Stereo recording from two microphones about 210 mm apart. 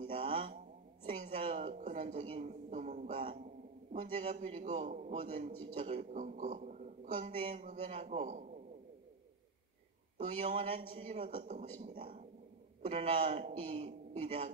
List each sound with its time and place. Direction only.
0.0 s a sound: 30° right (ahead or behind)
3.9 s a man's voice: 30° right (ahead or behind)
10.1 s a man's voice: 30° right (ahead or behind)